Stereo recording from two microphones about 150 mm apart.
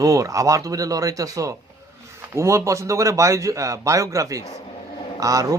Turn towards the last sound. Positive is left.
turn(degrees=-20)  # may be behind; listen again after turning